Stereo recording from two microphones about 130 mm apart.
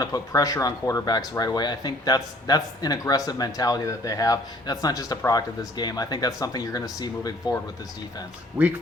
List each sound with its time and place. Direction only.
0.0 s speech: 30° left (ahead or behind)
8.6 s speech: 15° right (ahead or behind)